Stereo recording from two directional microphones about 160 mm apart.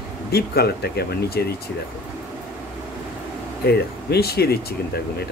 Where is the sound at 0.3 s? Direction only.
80° left.